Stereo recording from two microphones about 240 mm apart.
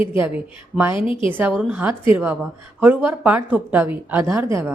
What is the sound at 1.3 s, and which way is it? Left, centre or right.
A woman's voice, centre.